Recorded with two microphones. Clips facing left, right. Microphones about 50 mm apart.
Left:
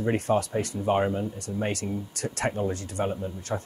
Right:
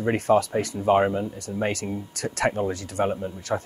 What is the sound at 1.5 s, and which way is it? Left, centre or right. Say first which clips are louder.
Speech: right 3 dB; centre.